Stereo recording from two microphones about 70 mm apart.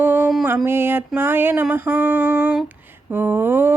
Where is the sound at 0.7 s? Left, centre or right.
Right.